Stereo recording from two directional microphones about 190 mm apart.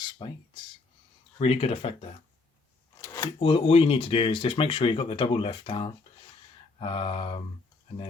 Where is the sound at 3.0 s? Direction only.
15° left (ahead or behind).